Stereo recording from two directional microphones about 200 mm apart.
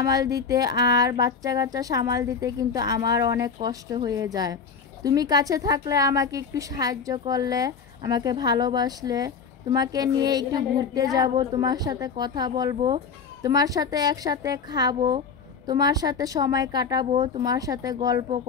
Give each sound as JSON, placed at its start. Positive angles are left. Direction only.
{"t": 0.0, "sound": "a woman's voice", "side_deg": -15}